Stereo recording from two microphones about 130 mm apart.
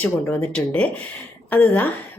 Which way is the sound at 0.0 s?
15° left (ahead or behind).